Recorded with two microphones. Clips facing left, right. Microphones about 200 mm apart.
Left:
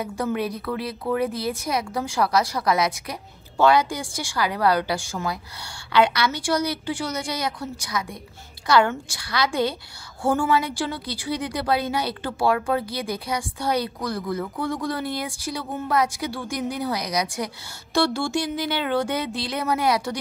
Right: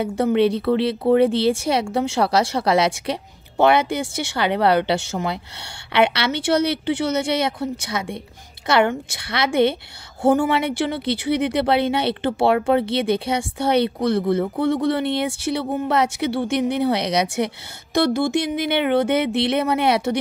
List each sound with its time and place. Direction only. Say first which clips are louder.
0.0 s speech: right 8 dB; 25° right (ahead or behind)